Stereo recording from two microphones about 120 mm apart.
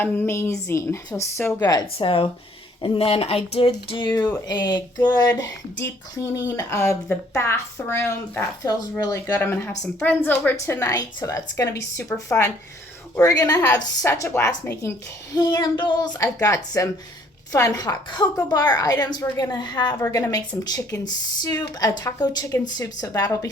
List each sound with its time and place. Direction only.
0.0 s a woman's voice: 20° left (ahead or behind)
2.0 s speech: 50° left (ahead or behind)
3.8 s a woman's voice: 40° left (ahead or behind)
9.2 s a woman's voice: 20° left (ahead or behind)
13.2 s a woman's voice: 30° left (ahead or behind)
20.0 s a woman's voice: 25° left (ahead or behind)